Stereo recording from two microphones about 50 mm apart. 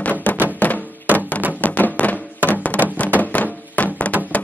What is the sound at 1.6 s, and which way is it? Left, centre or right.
Music, left.